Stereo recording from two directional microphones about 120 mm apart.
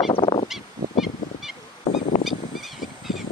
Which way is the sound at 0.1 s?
50° left (ahead or behind).